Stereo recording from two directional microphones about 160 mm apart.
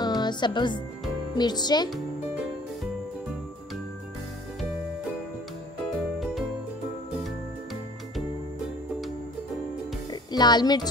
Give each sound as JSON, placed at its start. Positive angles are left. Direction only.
{"t": 0.0, "sound": "music", "side_deg": 25}
{"t": 1.3, "sound": "speech", "side_deg": 25}
{"t": 6.1, "sound": "music", "side_deg": 0}
{"t": 10.3, "sound": "speech", "side_deg": 25}